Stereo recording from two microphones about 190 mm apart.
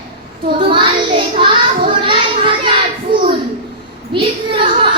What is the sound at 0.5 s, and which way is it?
Child singing, 25° right (ahead or behind).